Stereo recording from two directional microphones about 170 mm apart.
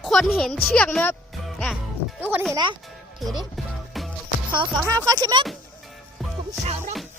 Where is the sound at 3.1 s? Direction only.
Centre (ahead or behind).